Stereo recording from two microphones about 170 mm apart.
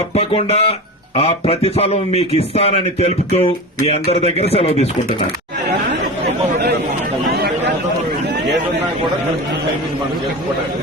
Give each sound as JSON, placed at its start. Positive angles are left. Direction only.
{"t": 0.2, "sound": "a man's voice", "side_deg": 35}